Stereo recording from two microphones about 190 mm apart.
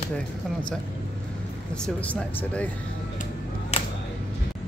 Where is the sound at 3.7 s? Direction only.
35° left (ahead or behind).